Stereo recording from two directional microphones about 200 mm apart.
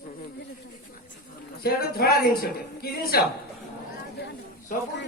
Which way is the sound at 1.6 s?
50° left (ahead or behind).